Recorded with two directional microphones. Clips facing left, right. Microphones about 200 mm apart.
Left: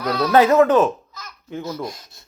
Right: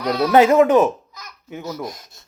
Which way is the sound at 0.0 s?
15° right (ahead or behind).